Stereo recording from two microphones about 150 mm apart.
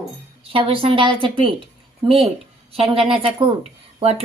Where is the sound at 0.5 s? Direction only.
35° right (ahead or behind).